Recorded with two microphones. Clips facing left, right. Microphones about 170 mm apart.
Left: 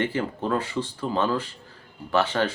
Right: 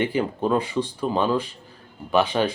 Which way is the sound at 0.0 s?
15° right (ahead or behind).